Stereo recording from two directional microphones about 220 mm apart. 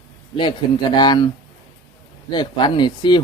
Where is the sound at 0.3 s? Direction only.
20° left (ahead or behind).